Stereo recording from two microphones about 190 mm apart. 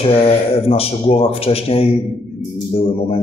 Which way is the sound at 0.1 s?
30° left (ahead or behind).